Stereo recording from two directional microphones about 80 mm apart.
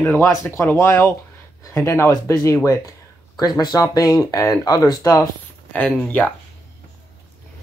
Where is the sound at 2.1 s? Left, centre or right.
Left.